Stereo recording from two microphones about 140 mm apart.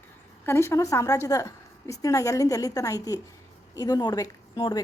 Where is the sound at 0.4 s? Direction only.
20° left (ahead or behind).